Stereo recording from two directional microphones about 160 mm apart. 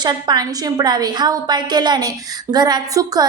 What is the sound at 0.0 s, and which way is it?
A woman's voice, 25° right (ahead or behind).